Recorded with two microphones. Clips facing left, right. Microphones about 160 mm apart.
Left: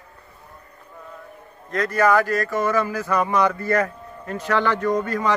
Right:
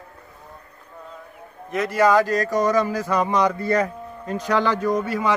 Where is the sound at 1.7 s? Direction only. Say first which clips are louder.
Right 1 dB; 10° right (ahead or behind).